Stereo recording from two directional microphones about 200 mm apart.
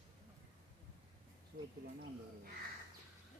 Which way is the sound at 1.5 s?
50° right (ahead or behind).